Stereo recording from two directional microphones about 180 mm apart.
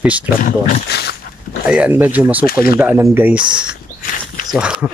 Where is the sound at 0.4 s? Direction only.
45° left (ahead or behind).